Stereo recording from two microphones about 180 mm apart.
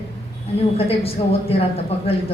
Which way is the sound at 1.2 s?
25° left (ahead or behind).